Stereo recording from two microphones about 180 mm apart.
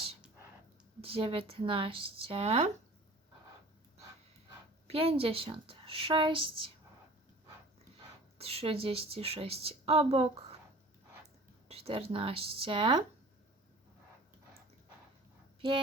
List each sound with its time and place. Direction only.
1.0 s a woman's voice: 30° right (ahead or behind)
4.9 s a woman's voice: 35° right (ahead or behind)
8.4 s a woman's voice: 35° right (ahead or behind)
11.7 s a woman's voice: 35° right (ahead or behind)